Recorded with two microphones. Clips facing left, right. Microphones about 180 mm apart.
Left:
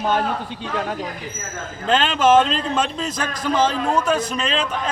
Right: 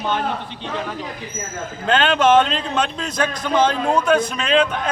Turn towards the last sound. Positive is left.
turn(degrees=0)  # may be behind; listen again after turning